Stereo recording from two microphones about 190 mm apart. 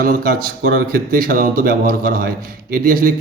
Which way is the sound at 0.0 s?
50° right (ahead or behind).